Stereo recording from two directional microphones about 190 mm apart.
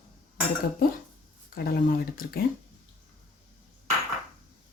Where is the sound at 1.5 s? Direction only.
50° left (ahead or behind).